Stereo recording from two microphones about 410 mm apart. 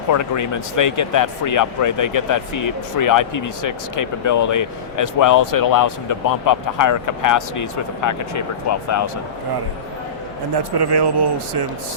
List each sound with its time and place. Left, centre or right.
0.1 s speech: left
10.5 s speech: right